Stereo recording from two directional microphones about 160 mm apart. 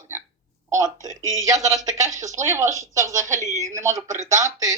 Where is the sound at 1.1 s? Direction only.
20° left (ahead or behind).